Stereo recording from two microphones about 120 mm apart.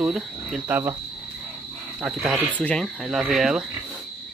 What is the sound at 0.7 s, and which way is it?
Speech, 20° right (ahead or behind).